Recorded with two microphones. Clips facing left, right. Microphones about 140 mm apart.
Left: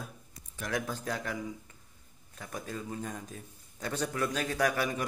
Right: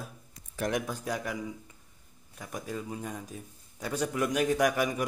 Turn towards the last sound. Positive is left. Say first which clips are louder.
# right 3 dB
turn(degrees=-15)  # may be behind; listen again after turning